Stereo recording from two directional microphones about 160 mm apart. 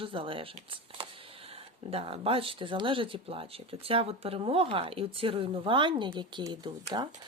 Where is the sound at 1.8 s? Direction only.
35° right (ahead or behind).